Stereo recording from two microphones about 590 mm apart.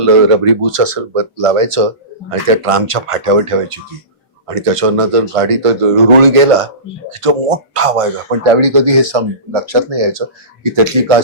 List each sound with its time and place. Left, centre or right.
0.0 s speech: right